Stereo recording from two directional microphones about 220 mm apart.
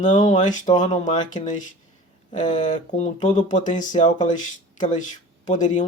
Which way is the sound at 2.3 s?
35° left (ahead or behind).